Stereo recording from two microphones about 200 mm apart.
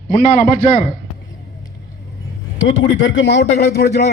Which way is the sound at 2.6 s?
70° left (ahead or behind).